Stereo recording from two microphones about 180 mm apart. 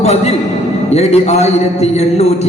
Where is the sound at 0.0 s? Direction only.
35° left (ahead or behind).